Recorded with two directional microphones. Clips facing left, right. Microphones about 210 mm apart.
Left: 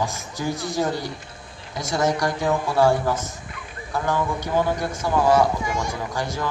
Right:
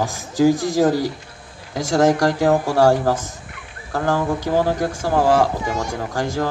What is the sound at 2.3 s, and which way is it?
Speech, 90° right.